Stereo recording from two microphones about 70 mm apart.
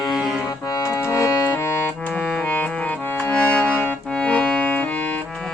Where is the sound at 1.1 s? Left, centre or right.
Left.